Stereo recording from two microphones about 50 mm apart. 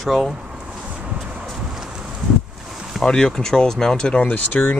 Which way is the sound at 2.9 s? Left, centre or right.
Centre.